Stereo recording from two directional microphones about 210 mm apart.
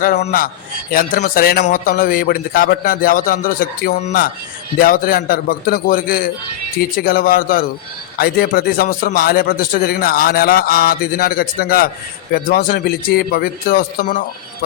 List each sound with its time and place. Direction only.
0.3 s a man's voice: 45° left (ahead or behind)